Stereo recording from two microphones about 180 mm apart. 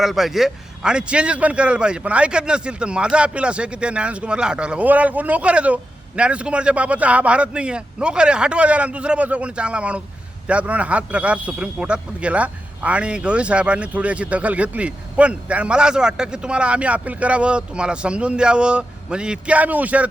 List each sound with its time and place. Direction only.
0.0 s a man's voice: centre (ahead or behind)